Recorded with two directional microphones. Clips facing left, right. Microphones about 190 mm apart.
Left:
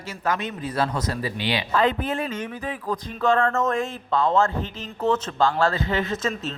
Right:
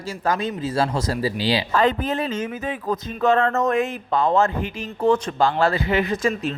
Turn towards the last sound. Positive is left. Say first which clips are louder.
# right 4 dB
turn(degrees=-15)  # may be behind; listen again after turning